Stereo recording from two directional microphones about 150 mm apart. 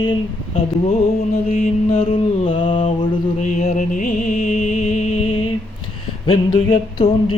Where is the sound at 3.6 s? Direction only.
60° left (ahead or behind).